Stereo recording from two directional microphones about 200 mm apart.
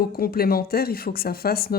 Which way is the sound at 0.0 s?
50° left (ahead or behind).